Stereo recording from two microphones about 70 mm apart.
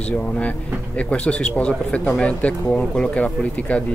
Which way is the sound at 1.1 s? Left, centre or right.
Centre.